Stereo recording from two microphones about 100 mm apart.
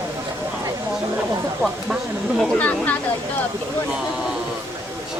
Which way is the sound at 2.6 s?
15° left (ahead or behind).